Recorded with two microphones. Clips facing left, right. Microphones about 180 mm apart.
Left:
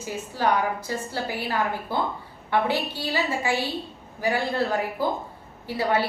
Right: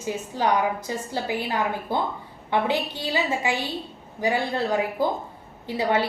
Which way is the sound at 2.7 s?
20° right (ahead or behind).